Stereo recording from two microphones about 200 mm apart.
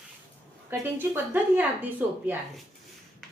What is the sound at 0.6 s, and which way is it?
A woman's voice, 10° right (ahead or behind).